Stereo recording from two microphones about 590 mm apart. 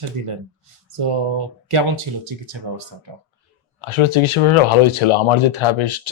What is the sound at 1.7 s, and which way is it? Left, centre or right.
Speech, right.